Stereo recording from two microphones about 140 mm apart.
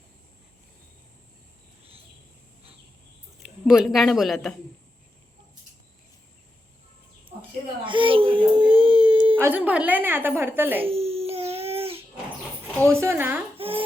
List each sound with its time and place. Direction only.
3.7 s speech: centre (ahead or behind)
7.9 s whimper: 35° right (ahead or behind)
9.3 s a sound: 15° right (ahead or behind)
10.8 s a sound: 45° right (ahead or behind)
12.9 s speech: 20° right (ahead or behind)
13.6 s babbling: 40° right (ahead or behind)